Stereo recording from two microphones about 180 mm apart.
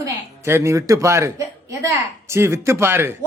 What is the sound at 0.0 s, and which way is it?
Speech, 15° right (ahead or behind).